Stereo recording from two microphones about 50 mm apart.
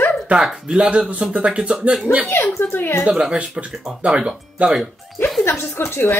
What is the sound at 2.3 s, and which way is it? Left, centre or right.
Speech, left.